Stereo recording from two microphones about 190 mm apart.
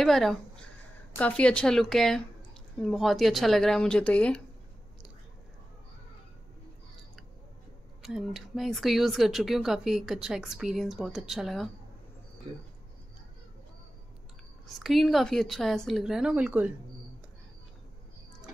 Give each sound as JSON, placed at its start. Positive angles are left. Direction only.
{"t": 0.0, "sound": "a woman's voice", "side_deg": 0}
{"t": 8.0, "sound": "speech", "side_deg": 0}
{"t": 14.8, "sound": "speech", "side_deg": 0}